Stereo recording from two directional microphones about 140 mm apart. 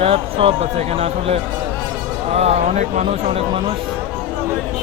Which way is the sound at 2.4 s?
55° right (ahead or behind).